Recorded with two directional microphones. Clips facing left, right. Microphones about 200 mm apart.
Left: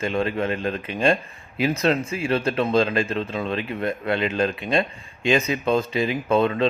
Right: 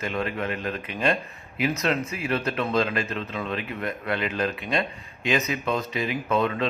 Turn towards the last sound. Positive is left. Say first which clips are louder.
# left 5 dB
turn(degrees=30)  # may be behind; listen again after turning